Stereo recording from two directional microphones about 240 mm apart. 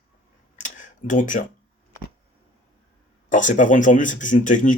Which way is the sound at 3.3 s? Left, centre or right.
Left.